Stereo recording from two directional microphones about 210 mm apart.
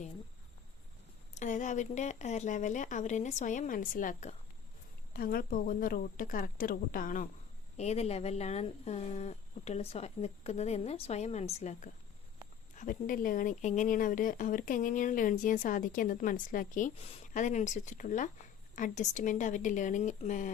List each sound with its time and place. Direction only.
1.3 s speech: 35° left (ahead or behind)